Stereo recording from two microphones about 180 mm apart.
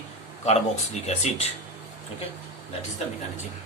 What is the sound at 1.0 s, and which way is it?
Speech, 35° left (ahead or behind).